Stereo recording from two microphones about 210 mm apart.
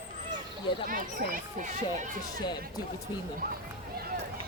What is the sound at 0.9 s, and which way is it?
Speech, 45° right (ahead or behind).